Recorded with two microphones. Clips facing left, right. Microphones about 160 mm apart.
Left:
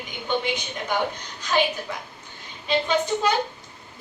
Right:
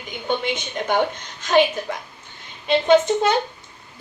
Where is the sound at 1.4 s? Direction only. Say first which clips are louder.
Right 6 dB; 50° right (ahead or behind).